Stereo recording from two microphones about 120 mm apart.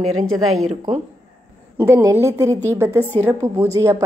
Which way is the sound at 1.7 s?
20° right (ahead or behind).